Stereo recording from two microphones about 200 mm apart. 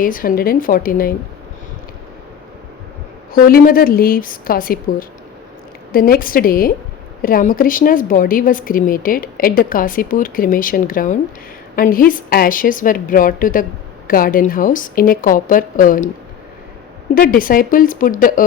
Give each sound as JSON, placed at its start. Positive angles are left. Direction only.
{"t": 0.0, "sound": "a woman's voice", "side_deg": 45}
{"t": 3.3, "sound": "a woman's voice", "side_deg": 45}
{"t": 17.2, "sound": "a woman's voice", "side_deg": 45}